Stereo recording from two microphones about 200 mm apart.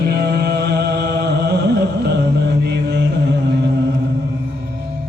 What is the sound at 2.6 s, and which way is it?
Chant, 55° right (ahead or behind).